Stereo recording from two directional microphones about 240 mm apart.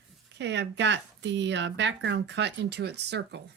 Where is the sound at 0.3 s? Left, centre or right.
Right.